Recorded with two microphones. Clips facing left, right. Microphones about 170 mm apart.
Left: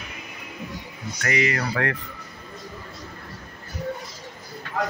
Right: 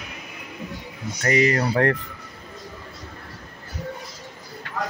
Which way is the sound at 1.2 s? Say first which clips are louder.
Right 5 dB; 35° right (ahead or behind).